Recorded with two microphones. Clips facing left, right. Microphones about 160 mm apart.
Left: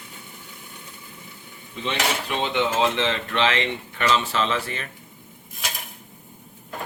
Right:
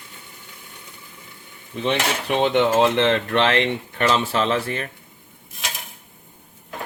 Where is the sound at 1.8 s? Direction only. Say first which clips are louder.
Right 4 dB; 55° right (ahead or behind).